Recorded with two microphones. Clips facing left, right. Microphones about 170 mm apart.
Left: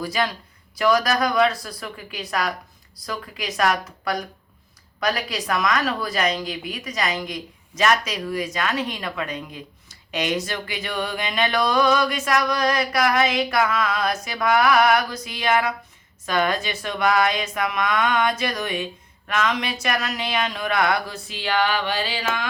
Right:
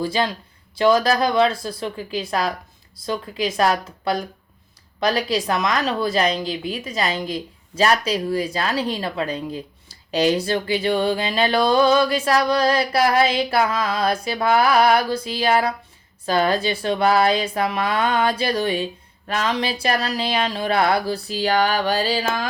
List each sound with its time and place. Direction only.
0.0 s speech: 30° right (ahead or behind)